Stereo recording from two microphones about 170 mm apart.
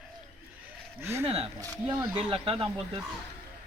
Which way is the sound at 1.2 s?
40° right (ahead or behind).